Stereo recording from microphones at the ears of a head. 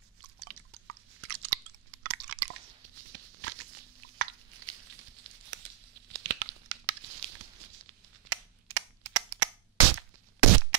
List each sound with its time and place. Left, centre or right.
0.2 s chewing: right